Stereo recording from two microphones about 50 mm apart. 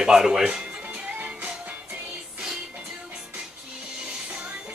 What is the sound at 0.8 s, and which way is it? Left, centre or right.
Music, right.